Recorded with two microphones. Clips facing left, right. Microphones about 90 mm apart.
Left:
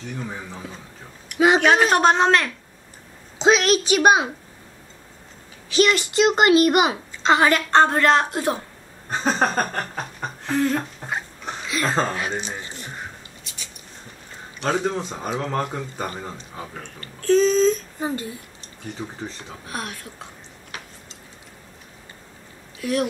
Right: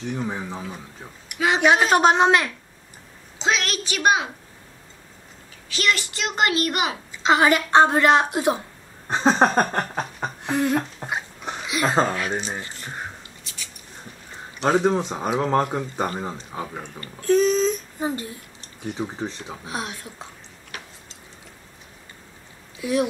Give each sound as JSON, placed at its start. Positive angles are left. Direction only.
{"t": 0.1, "sound": "speech", "side_deg": -20}
{"t": 3.3, "sound": "speech", "side_deg": 20}
{"t": 5.7, "sound": "speech", "side_deg": 20}
{"t": 7.2, "sound": "speech", "side_deg": -10}
{"t": 9.1, "sound": "a sound", "side_deg": -20}
{"t": 14.6, "sound": "speech", "side_deg": -15}
{"t": 22.8, "sound": "speech", "side_deg": -15}